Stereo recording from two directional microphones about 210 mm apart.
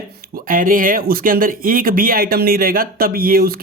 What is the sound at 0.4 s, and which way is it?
Speech, 40° right (ahead or behind).